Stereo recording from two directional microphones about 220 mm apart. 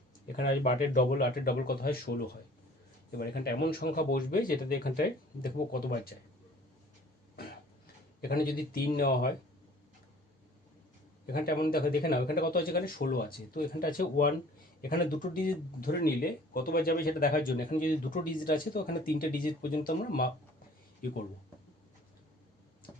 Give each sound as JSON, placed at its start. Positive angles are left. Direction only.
{"t": 0.4, "sound": "speech", "side_deg": 40}
{"t": 8.2, "sound": "speech", "side_deg": 45}
{"t": 11.3, "sound": "speech", "side_deg": 45}